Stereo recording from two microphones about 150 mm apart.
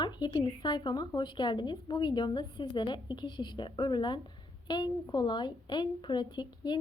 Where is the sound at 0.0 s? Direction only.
30° left (ahead or behind).